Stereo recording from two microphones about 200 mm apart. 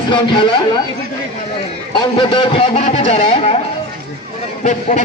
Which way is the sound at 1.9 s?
25° left (ahead or behind).